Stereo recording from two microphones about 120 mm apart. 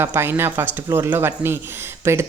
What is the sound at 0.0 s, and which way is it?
Speech, 20° right (ahead or behind).